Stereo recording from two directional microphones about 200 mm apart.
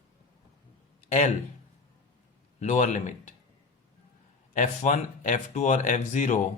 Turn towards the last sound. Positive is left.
turn(degrees=40)  # may be behind; listen again after turning